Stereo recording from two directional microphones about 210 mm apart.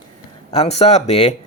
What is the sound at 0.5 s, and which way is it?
Speech, 30° left (ahead or behind).